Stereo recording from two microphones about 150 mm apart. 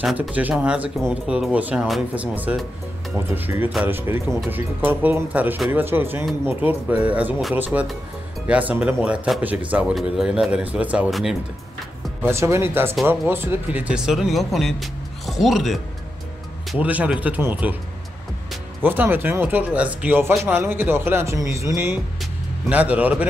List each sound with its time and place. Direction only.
0.0 s a man's voice: 5° right (ahead or behind)
12.2 s a man's voice: 15° right (ahead or behind)
18.8 s a man's voice: 15° right (ahead or behind)